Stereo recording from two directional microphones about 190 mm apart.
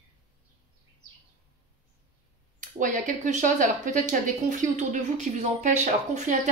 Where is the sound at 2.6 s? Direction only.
45° right (ahead or behind).